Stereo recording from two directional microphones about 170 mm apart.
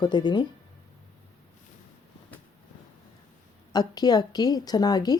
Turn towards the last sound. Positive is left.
turn(degrees=25)  # may be behind; listen again after turning